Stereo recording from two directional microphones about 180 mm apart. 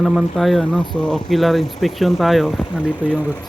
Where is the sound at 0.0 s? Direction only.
Centre (ahead or behind).